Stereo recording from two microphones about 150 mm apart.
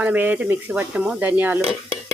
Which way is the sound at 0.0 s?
10° right (ahead or behind).